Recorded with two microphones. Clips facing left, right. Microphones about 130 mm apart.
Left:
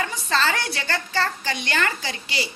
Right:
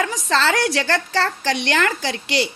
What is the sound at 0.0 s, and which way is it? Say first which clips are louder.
A woman's voice: right 4 dB; 90° right.